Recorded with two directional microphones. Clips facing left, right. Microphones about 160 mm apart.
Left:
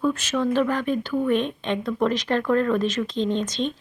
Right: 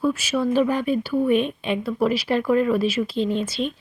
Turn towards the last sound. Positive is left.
turn(degrees=-5)  # may be behind; listen again after turning